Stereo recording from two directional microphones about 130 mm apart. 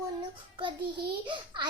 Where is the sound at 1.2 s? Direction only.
35° right (ahead or behind).